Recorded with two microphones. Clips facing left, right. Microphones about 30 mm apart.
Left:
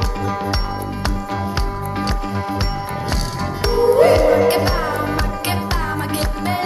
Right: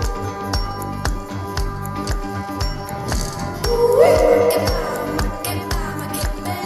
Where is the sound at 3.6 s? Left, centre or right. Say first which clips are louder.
Even; left.